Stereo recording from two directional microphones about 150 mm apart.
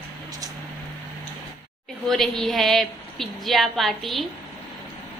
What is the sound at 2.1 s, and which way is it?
A woman's voice, centre (ahead or behind).